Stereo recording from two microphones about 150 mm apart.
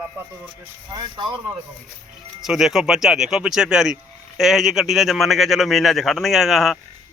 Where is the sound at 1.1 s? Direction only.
30° right (ahead or behind).